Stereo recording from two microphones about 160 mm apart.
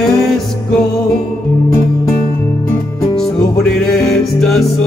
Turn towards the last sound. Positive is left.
turn(degrees=0)  # may be behind; listen again after turning